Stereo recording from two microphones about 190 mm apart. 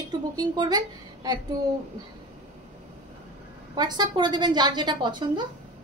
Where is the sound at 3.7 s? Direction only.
20° right (ahead or behind).